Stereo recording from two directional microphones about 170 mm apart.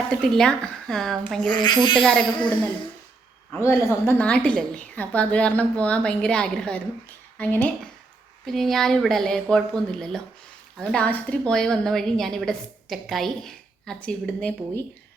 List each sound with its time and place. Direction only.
0.2 s a woman's voice: 5° left (ahead or behind)
1.5 s speech: 25° left (ahead or behind)
2.0 s a woman's voice: 5° left (ahead or behind)
3.6 s a woman's voice: 15° left (ahead or behind)